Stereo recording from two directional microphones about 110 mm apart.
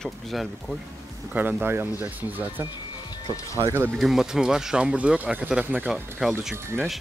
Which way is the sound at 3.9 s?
Centre (ahead or behind).